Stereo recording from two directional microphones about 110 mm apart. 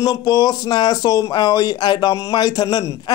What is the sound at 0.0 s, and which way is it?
Speech, 35° left (ahead or behind).